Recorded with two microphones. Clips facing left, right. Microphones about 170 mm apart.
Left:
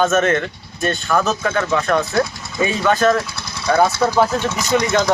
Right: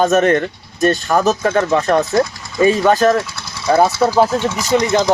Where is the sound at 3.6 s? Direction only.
25° right (ahead or behind).